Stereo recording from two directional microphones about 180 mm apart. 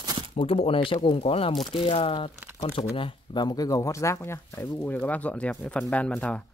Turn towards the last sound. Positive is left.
turn(degrees=5)  # may be behind; listen again after turning